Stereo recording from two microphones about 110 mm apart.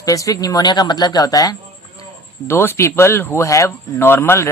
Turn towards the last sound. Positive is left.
turn(degrees=25)  # may be behind; listen again after turning